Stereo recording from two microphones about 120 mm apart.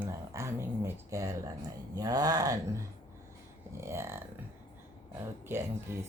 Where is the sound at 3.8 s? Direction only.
20° right (ahead or behind).